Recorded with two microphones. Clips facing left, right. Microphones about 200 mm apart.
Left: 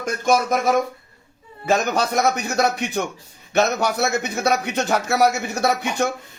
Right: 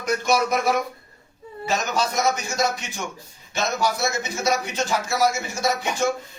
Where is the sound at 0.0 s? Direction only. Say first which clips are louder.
Left 2 dB; 50° left (ahead or behind).